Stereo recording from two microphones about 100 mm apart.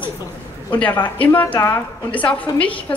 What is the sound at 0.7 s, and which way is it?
A woman's voice, 15° left (ahead or behind).